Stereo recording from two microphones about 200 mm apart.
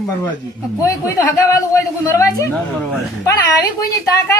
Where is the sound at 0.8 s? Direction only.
15° left (ahead or behind).